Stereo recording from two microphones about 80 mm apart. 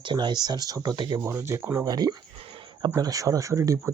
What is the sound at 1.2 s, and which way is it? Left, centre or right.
Speech, right.